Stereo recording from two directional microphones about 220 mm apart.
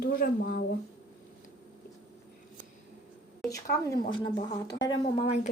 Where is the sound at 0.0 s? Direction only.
40° left (ahead or behind).